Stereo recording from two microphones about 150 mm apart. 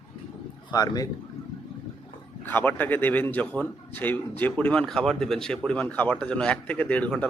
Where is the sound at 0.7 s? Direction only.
25° left (ahead or behind).